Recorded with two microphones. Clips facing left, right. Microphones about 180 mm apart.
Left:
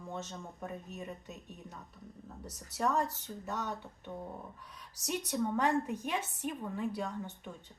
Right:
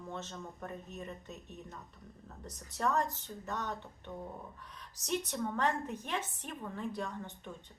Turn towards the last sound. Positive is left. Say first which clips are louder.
# left 2 dB
turn(degrees=10)  # may be behind; listen again after turning